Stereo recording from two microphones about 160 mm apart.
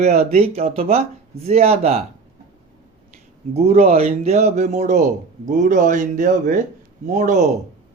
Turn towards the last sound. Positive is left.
turn(degrees=-50)  # may be behind; listen again after turning